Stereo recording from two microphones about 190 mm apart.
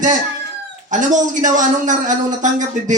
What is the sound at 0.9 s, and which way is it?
A man's voice, 40° right (ahead or behind).